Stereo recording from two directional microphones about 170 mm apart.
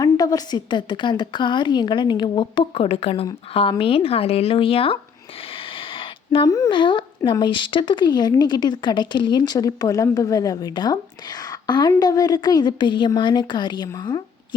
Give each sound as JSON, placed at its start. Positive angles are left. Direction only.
{"t": 0.0, "sound": "speech", "side_deg": 20}
{"t": 5.5, "sound": "a sound", "side_deg": 30}
{"t": 6.5, "sound": "speech", "side_deg": 25}